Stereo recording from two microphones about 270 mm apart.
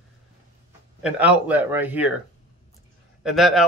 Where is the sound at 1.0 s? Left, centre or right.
Centre.